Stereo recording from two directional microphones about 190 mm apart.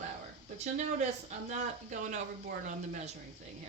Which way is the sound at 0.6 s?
40° right (ahead or behind).